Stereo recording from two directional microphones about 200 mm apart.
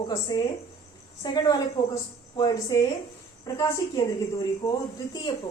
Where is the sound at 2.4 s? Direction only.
20° left (ahead or behind).